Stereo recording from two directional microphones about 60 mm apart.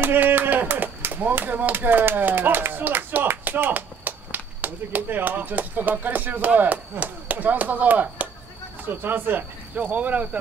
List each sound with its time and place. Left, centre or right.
0.0 s clapping: right
8.8 s speech: right